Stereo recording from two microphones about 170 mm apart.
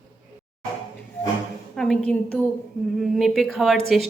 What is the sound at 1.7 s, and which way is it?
Speech, 5° left (ahead or behind).